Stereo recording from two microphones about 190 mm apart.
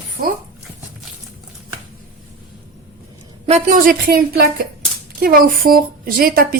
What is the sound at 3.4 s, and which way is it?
Speech, 35° right (ahead or behind).